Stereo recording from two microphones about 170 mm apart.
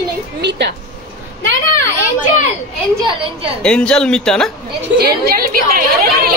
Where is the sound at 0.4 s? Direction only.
90° right.